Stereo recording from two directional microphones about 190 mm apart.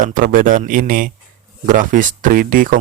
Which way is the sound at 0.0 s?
45° right (ahead or behind).